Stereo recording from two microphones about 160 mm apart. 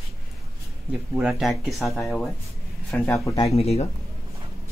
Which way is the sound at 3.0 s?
15° left (ahead or behind).